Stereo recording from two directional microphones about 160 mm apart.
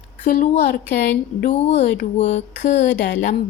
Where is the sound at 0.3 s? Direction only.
55° left (ahead or behind).